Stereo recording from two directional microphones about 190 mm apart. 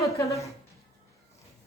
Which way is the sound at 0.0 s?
15° left (ahead or behind).